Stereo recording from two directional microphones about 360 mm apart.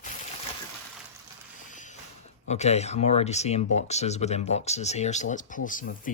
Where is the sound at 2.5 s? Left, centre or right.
Centre.